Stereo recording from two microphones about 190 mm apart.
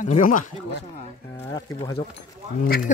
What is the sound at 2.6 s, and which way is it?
Speech, 50° left (ahead or behind).